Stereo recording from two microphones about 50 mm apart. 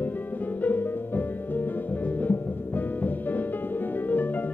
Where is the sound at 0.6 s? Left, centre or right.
Left.